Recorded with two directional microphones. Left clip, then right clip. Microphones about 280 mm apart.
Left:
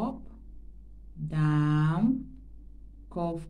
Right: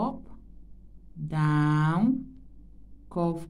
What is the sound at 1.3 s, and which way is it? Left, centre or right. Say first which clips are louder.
A woman's voice: right 3 dB; right.